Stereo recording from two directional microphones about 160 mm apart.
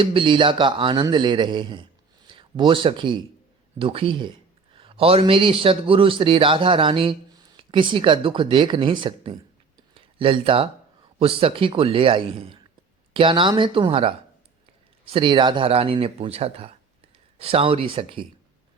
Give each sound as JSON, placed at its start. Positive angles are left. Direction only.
{"t": 0.0, "sound": "a man's voice", "side_deg": -35}
{"t": 9.9, "sound": "a sound", "side_deg": -35}
{"t": 11.2, "sound": "speech", "side_deg": -35}